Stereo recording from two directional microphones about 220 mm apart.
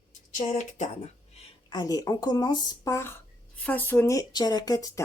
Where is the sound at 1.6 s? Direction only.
20° left (ahead or behind).